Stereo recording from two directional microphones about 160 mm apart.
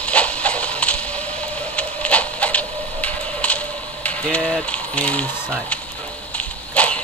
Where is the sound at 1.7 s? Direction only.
10° left (ahead or behind).